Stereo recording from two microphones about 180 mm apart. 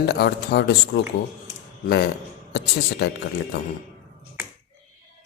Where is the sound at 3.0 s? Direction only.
65° left (ahead or behind).